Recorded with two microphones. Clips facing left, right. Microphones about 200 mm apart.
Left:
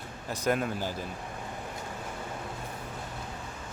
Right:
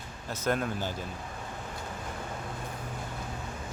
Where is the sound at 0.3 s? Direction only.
15° left (ahead or behind).